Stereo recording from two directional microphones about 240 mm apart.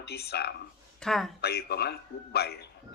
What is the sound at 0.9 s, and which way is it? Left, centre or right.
Speech, centre.